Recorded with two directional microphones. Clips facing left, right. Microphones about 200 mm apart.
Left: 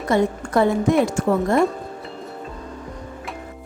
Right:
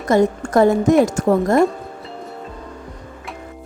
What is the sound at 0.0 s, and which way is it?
A woman's voice, 45° right (ahead or behind).